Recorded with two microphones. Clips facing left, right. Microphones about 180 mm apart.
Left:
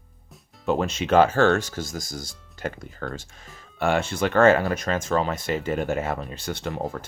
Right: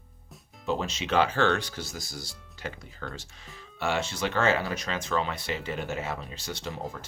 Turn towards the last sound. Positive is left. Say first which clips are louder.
# left 6 dB
turn(degrees=55)  # may be behind; listen again after turning